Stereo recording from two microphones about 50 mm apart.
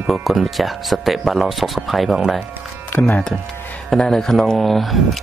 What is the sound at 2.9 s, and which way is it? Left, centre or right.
Speech, left.